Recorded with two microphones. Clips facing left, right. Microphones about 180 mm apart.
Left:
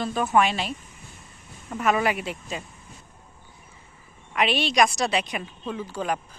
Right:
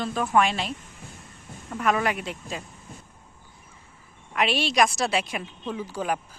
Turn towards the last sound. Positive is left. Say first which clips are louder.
# even
turn(degrees=-10)  # may be behind; listen again after turning